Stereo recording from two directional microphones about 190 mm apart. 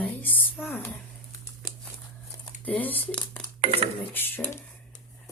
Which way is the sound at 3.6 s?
30° right (ahead or behind).